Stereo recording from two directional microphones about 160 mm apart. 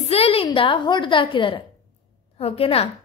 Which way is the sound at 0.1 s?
40° left (ahead or behind).